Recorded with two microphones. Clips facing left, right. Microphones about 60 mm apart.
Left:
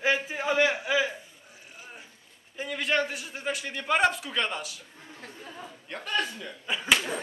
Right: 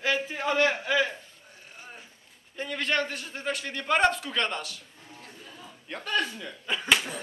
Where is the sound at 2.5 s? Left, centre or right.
Centre.